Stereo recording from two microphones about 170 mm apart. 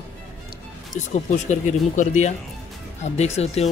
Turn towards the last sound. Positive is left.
turn(degrees=40)  # may be behind; listen again after turning